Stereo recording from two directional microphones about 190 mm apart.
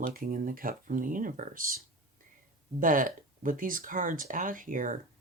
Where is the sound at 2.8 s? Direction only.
45° right (ahead or behind).